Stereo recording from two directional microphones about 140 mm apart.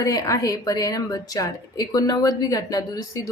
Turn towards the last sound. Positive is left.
turn(degrees=25)  # may be behind; listen again after turning